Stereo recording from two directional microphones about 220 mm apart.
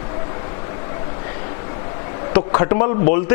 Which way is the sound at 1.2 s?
20° left (ahead or behind).